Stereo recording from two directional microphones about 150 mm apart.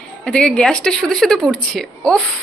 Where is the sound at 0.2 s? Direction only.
5° left (ahead or behind).